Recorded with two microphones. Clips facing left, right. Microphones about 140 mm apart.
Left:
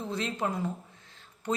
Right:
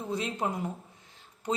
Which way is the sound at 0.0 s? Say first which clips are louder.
Even; 15° right (ahead or behind).